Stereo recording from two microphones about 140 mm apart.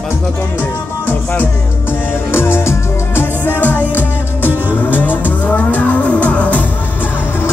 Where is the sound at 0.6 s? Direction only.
15° left (ahead or behind).